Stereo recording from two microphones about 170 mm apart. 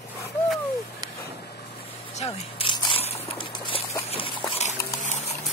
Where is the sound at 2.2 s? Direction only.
35° left (ahead or behind).